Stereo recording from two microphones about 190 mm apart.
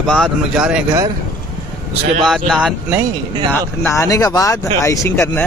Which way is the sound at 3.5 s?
15° left (ahead or behind).